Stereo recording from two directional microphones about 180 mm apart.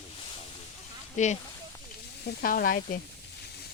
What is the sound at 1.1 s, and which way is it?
Speech, 40° left (ahead or behind).